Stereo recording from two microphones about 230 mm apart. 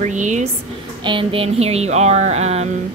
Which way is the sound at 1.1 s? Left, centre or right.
Right.